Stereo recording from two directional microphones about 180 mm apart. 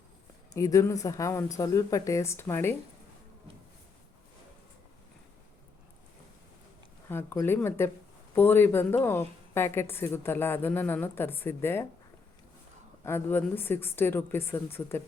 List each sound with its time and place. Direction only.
0.5 s a woman's voice: 20° left (ahead or behind)
7.1 s a woman's voice: 15° left (ahead or behind)
13.1 s a woman's voice: 10° left (ahead or behind)